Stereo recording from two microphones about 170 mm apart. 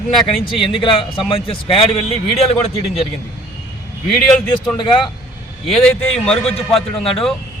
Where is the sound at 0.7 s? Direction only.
30° left (ahead or behind).